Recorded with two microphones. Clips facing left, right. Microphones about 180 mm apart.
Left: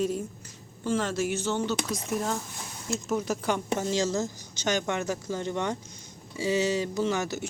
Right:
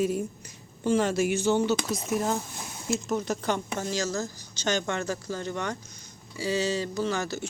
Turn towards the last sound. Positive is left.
turn(degrees=20)  # may be behind; listen again after turning